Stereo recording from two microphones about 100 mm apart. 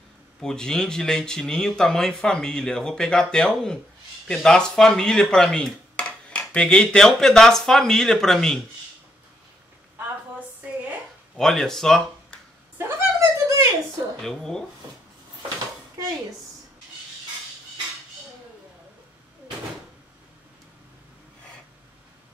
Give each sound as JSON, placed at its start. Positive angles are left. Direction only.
{"t": 0.4, "sound": "speech", "side_deg": 5}
{"t": 4.3, "sound": "dishes", "side_deg": 5}
{"t": 11.3, "sound": "speech", "side_deg": 5}
{"t": 12.7, "sound": "a sound", "side_deg": -25}
{"t": 14.2, "sound": "dishes", "side_deg": 5}